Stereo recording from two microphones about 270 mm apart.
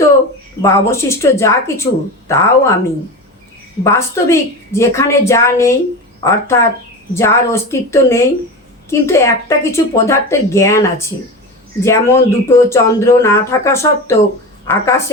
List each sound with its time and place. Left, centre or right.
0.6 s speech: centre
3.8 s speech: centre